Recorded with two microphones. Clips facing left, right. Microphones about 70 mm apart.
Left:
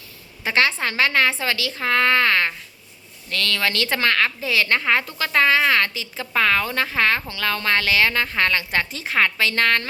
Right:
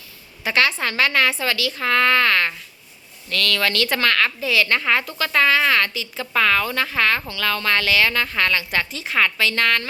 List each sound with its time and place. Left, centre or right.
0.4 s speech: left